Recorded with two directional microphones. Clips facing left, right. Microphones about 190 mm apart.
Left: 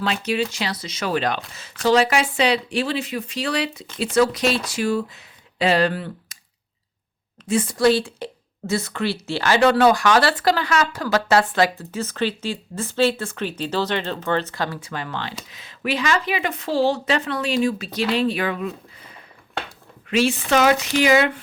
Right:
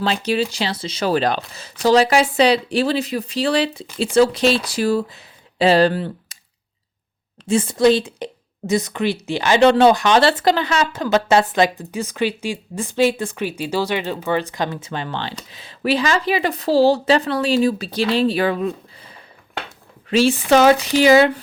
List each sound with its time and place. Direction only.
0.0 s a woman's voice: 30° right (ahead or behind)
7.4 s a woman's voice: 25° right (ahead or behind)